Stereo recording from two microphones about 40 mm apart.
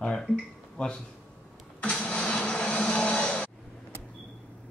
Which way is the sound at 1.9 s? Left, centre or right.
Centre.